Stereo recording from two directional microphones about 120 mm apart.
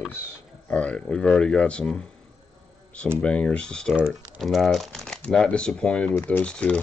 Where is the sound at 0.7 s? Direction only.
10° left (ahead or behind).